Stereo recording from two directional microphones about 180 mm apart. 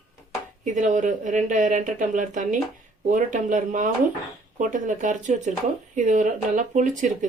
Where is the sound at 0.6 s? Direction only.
45° right (ahead or behind).